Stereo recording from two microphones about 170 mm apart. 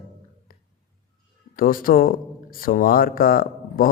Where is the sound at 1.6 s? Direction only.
55° left (ahead or behind).